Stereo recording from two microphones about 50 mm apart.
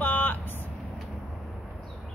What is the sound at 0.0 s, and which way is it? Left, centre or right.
Vehicle, left.